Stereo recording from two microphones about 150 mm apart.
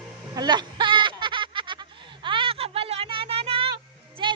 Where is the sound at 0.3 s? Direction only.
30° right (ahead or behind).